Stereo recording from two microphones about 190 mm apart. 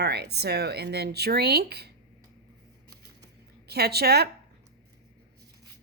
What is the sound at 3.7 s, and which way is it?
Speech, 55° right (ahead or behind).